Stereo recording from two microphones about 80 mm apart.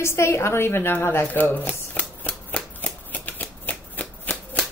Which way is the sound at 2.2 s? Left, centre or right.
Centre.